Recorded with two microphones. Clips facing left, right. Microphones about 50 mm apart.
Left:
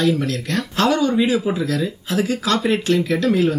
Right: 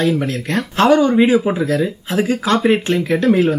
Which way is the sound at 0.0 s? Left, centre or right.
Right.